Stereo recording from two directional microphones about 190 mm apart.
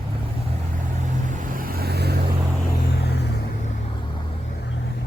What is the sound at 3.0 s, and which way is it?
Vehicle, 60° left (ahead or behind).